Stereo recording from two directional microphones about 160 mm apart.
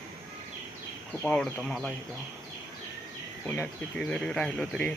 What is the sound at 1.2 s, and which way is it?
Speech, 5° left (ahead or behind).